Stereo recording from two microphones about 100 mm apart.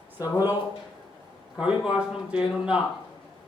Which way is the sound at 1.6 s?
10° right (ahead or behind).